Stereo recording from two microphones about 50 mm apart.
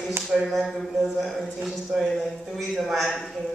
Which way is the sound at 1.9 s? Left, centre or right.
Centre.